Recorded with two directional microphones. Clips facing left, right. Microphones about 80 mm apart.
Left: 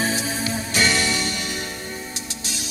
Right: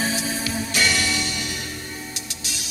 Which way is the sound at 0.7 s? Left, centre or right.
Left.